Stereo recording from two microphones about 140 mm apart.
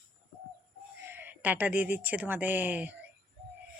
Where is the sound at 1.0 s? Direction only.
15° right (ahead or behind).